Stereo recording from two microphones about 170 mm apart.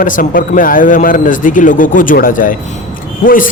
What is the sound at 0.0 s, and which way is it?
Speech, 55° left (ahead or behind).